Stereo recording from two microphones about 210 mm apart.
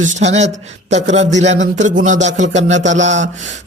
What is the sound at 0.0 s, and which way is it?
A man's voice, 35° right (ahead or behind).